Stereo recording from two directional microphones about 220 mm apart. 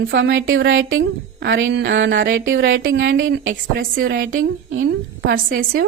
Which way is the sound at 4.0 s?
40° right (ahead or behind).